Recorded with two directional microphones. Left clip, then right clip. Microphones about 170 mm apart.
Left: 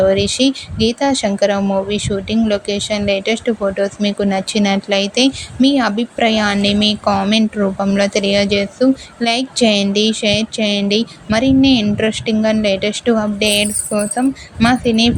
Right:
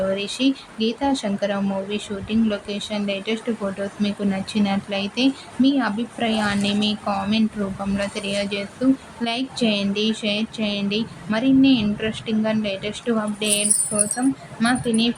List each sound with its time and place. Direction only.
0.1 s speech: 40° left (ahead or behind)